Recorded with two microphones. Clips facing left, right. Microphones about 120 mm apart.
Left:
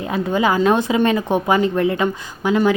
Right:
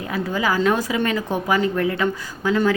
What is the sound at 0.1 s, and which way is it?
A woman's voice, 25° left (ahead or behind).